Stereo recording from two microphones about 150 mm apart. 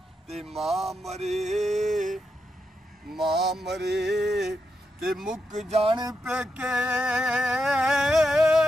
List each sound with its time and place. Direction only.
0.4 s vehicle: centre (ahead or behind)
1.5 s a sound: centre (ahead or behind)
3.1 s vehicle: centre (ahead or behind)
5.7 s speech: 40° right (ahead or behind)
6.2 s vehicle: 5° right (ahead or behind)